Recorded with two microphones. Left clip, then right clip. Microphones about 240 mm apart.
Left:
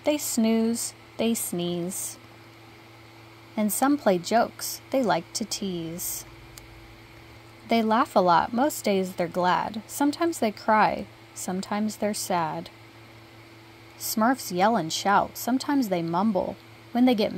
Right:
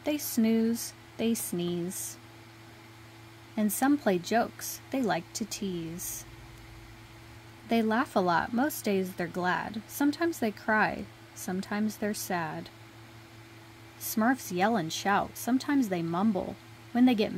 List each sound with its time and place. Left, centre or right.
0.0 s a woman's voice: centre
3.5 s a woman's voice: centre
7.6 s a woman's voice: centre
14.0 s speech: centre